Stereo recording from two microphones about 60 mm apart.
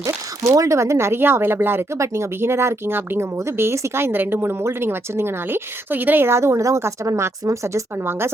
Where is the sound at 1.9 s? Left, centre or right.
Right.